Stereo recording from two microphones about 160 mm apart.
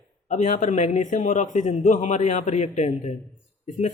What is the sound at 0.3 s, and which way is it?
Speech, 50° left (ahead or behind).